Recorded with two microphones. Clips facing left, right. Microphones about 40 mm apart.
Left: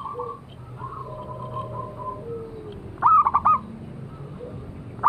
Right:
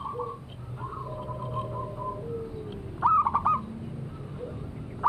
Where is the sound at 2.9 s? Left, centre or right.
Left.